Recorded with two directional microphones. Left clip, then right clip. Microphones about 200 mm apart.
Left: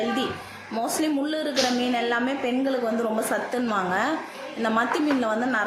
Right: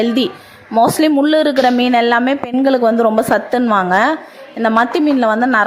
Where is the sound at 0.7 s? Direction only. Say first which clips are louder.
Right 14 dB; 40° right (ahead or behind).